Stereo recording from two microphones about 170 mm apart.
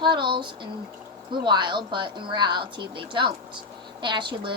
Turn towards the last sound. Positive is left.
turn(degrees=-30)  # may be behind; listen again after turning